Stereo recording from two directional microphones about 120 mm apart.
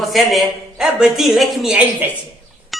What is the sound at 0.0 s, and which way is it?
A woman's voice, centre (ahead or behind).